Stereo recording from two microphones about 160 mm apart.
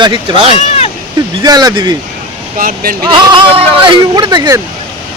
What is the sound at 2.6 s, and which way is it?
Speech, 65° right (ahead or behind).